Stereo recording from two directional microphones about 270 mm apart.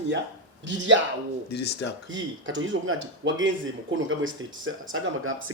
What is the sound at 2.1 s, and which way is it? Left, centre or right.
Speech, right.